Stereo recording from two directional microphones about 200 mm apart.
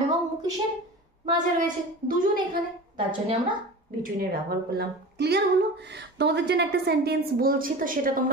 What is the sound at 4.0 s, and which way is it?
A woman's voice, 50° right (ahead or behind).